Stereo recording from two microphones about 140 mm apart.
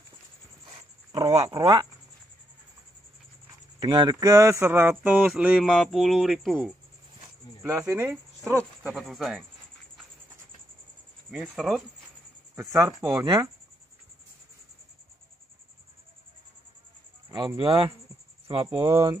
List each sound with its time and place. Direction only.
1.1 s speech: 25° right (ahead or behind)
3.8 s speech: 30° right (ahead or behind); by 6.7 s centre (ahead or behind)
7.2 s a sound: 20° right (ahead or behind)
7.8 s speech: 15° right (ahead or behind)
8.8 s speech: centre (ahead or behind)
11.4 s speech: centre (ahead or behind)
12.5 s speech: 25° right (ahead or behind)
17.6 s speech: 35° right (ahead or behind)